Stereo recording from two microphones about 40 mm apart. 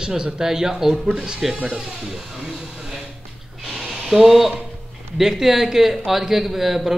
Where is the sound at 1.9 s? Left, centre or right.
Centre.